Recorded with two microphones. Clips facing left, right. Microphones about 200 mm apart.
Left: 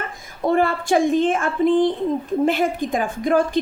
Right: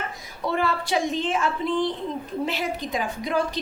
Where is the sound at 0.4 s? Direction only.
50° left (ahead or behind).